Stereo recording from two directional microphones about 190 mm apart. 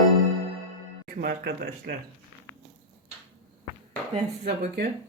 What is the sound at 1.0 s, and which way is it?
Speech, 55° right (ahead or behind).